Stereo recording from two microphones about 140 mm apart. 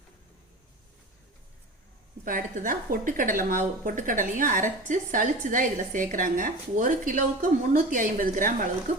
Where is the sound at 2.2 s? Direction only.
75° right (ahead or behind).